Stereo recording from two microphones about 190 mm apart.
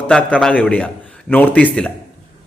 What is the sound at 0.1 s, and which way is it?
Speech, 10° left (ahead or behind).